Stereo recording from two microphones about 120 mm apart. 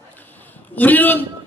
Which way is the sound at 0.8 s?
15° left (ahead or behind).